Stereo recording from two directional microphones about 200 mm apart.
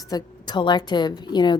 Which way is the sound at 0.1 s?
20° left (ahead or behind).